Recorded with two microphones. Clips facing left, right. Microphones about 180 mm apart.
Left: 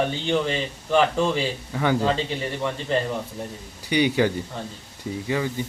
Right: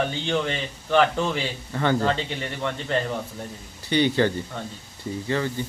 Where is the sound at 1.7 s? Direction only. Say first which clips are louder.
Even; 10° left (ahead or behind).